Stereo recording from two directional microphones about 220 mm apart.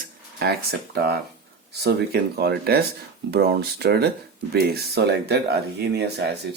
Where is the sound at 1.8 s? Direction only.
50° right (ahead or behind).